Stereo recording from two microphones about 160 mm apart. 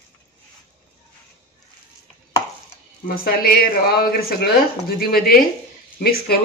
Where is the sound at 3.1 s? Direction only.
65° left (ahead or behind).